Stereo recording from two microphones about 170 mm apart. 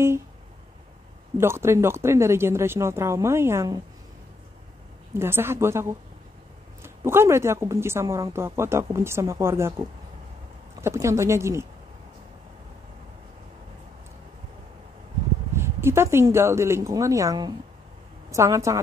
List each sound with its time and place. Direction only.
1.4 s speech: 15° right (ahead or behind)
5.1 s speech: 15° right (ahead or behind)
15.5 s speech: 15° right (ahead or behind)